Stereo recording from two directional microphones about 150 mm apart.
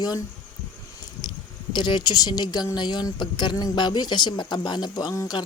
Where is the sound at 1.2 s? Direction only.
30° left (ahead or behind).